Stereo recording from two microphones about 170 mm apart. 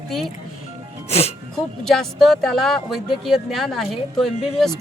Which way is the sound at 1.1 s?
40° left (ahead or behind).